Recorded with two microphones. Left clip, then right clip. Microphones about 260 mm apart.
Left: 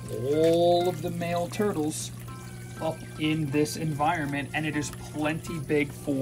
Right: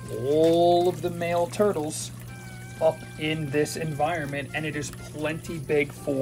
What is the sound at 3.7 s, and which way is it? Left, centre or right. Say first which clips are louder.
Speech: even; centre.